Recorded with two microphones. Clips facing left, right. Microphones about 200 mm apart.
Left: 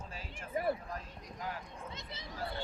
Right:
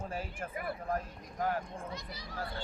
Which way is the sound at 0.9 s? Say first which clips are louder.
Right 8 dB; 55° right (ahead or behind).